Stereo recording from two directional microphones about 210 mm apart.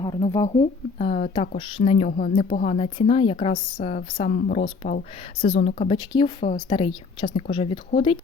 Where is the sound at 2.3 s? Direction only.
30° left (ahead or behind).